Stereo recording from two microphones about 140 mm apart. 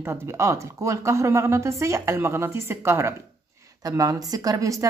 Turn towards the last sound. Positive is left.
turn(degrees=-25)  # may be behind; listen again after turning